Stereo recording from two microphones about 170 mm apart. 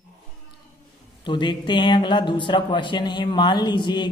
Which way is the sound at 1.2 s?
25° left (ahead or behind).